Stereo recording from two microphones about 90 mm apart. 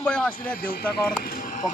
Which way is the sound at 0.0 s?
15° left (ahead or behind).